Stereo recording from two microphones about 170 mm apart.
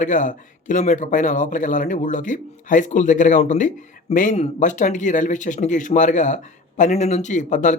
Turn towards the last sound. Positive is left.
turn(degrees=45)  # may be behind; listen again after turning